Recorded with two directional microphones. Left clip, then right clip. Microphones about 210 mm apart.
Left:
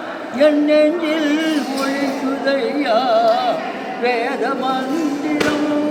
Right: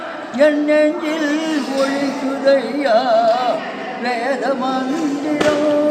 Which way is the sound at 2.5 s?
15° right (ahead or behind).